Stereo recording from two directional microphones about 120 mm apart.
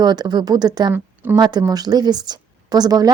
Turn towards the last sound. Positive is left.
turn(degrees=-35)  # may be behind; listen again after turning